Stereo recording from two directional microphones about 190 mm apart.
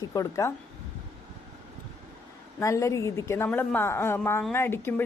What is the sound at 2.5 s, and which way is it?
A woman's voice, 15° left (ahead or behind).